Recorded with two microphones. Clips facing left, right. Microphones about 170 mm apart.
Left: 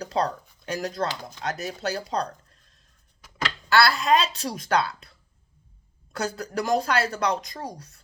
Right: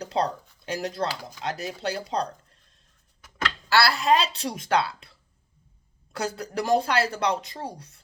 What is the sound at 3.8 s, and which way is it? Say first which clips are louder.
A woman's voice: left 1 dB; 35° right (ahead or behind).